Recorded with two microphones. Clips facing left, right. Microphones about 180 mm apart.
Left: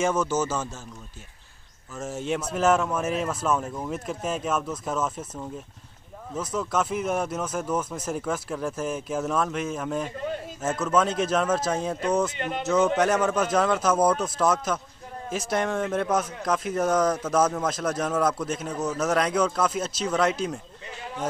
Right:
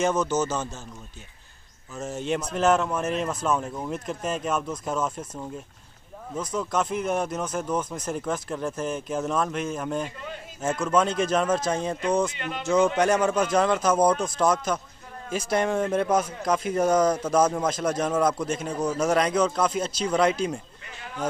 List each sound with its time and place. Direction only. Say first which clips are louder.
0.0 s a man's voice: right 1 dB; 10° left (ahead or behind)
2.0 s a man's voice: right 1 dB; 5° left (ahead or behind)
6.3 s speech: even; 5° left (ahead or behind)
12.4 s speech: left 3 dB; 45° left (ahead or behind)
12.6 s speech: right 1 dB; 5° left (ahead or behind)